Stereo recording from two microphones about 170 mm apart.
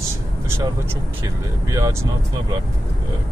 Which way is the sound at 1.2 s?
20° right (ahead or behind).